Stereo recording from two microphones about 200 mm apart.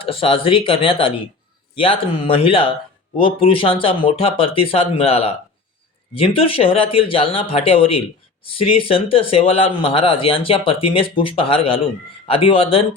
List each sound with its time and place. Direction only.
0.0 s speech: 30° left (ahead or behind)